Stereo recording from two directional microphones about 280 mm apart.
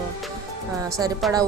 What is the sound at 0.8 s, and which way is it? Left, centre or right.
Speech, centre.